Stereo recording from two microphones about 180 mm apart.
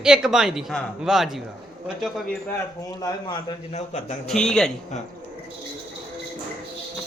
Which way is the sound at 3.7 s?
40° left (ahead or behind).